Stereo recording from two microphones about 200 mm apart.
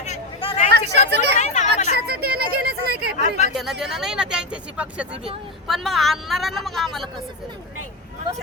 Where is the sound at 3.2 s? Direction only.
35° left (ahead or behind).